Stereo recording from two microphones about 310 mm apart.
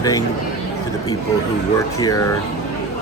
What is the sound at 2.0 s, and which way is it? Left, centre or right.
Speech, centre.